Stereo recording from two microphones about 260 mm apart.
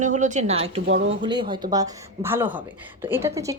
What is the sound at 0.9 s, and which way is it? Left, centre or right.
Speech, right.